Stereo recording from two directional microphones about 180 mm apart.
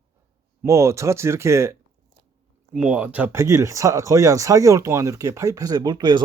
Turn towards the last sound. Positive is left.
turn(degrees=-25)  # may be behind; listen again after turning